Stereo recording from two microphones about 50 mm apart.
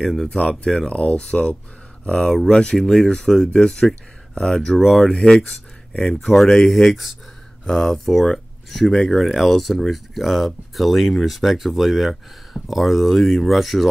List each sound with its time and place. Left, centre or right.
0.0 s speech: centre
0.7 s speech: centre